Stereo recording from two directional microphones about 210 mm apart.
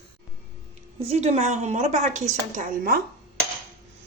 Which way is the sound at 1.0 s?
30° right (ahead or behind).